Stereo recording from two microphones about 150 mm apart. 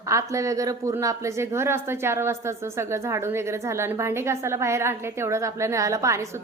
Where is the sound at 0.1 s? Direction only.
20° right (ahead or behind).